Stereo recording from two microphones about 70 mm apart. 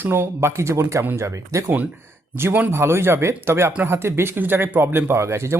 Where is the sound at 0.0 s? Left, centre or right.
Right.